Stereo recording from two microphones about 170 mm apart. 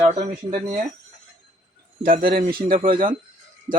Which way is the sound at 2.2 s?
30° right (ahead or behind).